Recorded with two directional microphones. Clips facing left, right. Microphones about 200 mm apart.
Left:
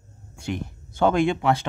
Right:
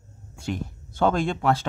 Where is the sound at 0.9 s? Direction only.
15° left (ahead or behind).